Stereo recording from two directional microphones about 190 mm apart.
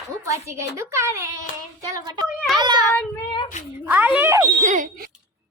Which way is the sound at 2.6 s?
20° right (ahead or behind).